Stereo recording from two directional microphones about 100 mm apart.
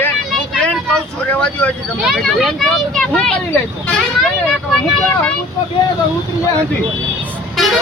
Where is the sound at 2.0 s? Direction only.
5° right (ahead or behind).